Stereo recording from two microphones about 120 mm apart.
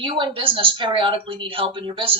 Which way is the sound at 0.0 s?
45° right (ahead or behind).